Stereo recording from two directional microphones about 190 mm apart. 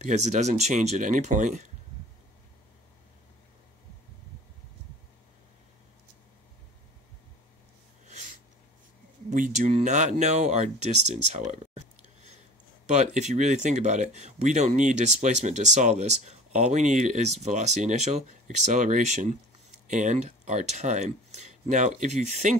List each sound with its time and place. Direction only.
0.0 s speech: 35° right (ahead or behind)
9.3 s speech: 40° right (ahead or behind)